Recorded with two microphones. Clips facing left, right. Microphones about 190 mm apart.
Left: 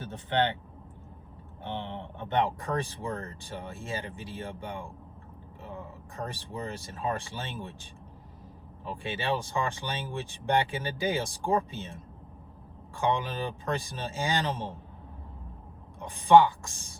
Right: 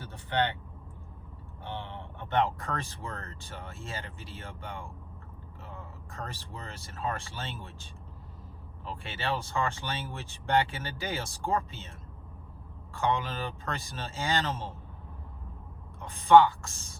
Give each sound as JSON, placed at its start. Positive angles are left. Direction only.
{"t": 0.0, "sound": "speech", "side_deg": 20}
{"t": 1.6, "sound": "speech", "side_deg": 20}
{"t": 16.0, "sound": "speech", "side_deg": 15}